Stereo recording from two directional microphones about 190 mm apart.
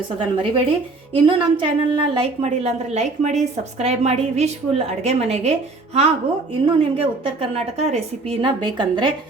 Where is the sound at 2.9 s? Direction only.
40° right (ahead or behind).